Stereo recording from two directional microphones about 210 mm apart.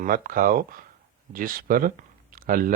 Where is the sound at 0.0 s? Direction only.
40° right (ahead or behind).